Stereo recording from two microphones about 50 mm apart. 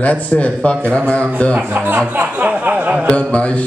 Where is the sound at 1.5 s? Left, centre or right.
Right.